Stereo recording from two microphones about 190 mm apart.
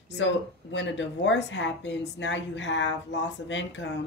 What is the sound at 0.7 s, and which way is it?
A woman's voice, 75° left (ahead or behind).